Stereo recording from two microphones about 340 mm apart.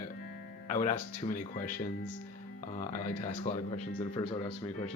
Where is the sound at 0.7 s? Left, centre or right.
Left.